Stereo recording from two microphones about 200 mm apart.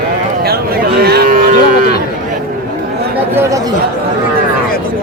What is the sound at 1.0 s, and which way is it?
Cattle, 50° right (ahead or behind).